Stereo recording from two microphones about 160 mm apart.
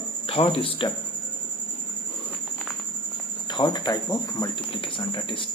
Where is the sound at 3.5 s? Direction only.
30° left (ahead or behind).